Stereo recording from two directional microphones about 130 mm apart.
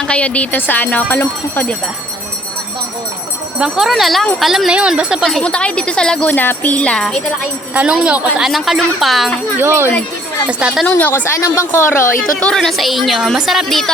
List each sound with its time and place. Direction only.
0.1 s speech: 10° left (ahead or behind)
3.6 s a woman's voice: centre (ahead or behind)
7.7 s a woman's voice: 10° right (ahead or behind)
9.6 s speech: 20° right (ahead or behind)
10.6 s a woman's voice: 5° right (ahead or behind)
10.8 s a woman's voice: 15° left (ahead or behind)
12.4 s a woman's voice: 5° left (ahead or behind)